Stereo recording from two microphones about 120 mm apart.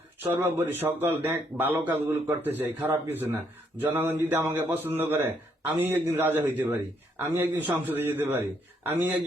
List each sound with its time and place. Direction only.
0.2 s a man's voice: 15° right (ahead or behind)